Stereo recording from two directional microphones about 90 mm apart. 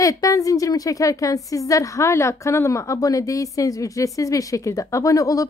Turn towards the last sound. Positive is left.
turn(degrees=40)  # may be behind; listen again after turning